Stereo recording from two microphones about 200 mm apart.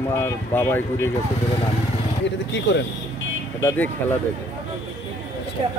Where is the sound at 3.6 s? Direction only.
10° left (ahead or behind).